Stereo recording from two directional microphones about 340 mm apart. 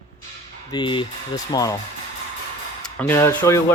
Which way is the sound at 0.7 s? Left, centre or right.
Centre.